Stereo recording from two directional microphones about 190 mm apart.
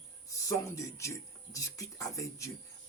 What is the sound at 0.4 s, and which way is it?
Speech, 15° left (ahead or behind).